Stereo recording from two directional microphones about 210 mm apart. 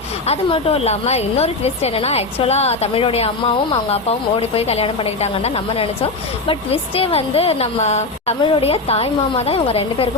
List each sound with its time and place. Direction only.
0.3 s a woman's voice: 30° left (ahead or behind)